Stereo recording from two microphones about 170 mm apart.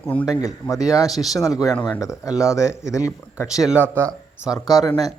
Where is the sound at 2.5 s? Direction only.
15° left (ahead or behind).